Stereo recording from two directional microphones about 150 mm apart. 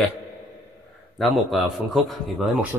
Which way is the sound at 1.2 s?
Centre (ahead or behind).